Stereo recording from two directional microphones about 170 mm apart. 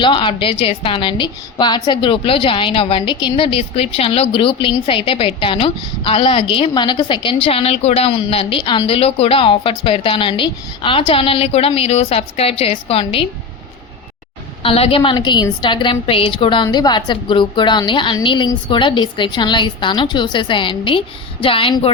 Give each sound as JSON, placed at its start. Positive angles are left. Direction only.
{"t": 0.0, "sound": "a woman's voice", "side_deg": 30}
{"t": 14.6, "sound": "a woman's voice", "side_deg": 35}